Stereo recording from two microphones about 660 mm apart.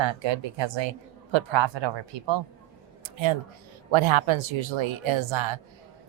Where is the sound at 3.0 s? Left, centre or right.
Right.